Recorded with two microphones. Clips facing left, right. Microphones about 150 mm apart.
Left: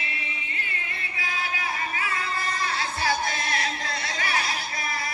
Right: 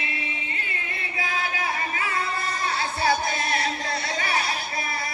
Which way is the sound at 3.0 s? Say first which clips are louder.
Right 4 dB; 30° right (ahead or behind).